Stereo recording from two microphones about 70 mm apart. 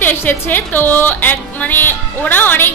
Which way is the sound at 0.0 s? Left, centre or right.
Left.